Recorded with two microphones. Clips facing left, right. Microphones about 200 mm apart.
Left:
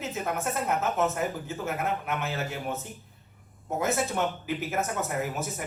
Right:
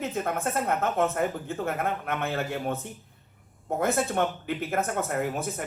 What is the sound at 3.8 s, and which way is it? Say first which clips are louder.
Speech: right 2 dB; 55° right (ahead or behind).